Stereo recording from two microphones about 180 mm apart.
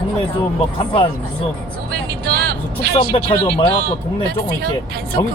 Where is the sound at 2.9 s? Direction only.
30° left (ahead or behind).